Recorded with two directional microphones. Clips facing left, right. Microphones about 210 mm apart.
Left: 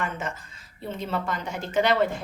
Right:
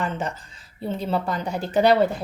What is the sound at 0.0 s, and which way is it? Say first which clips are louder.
Speech: right 4 dB; 35° right (ahead or behind).